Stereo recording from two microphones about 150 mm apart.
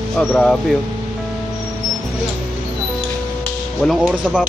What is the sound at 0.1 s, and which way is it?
Speech, 5° left (ahead or behind).